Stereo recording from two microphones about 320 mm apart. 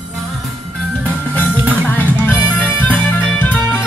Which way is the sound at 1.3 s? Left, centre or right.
Centre.